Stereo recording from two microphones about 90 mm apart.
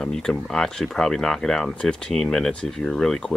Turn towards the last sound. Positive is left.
turn(degrees=5)  # may be behind; listen again after turning